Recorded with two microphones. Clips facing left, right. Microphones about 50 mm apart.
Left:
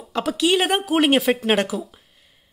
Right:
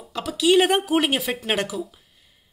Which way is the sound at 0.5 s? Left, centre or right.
Centre.